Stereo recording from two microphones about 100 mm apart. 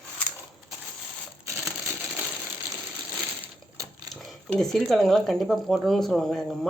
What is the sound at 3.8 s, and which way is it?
Speech, centre (ahead or behind).